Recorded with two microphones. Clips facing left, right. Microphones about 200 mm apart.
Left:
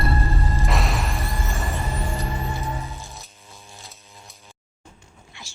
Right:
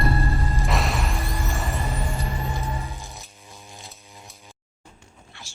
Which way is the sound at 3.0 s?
15° right (ahead or behind).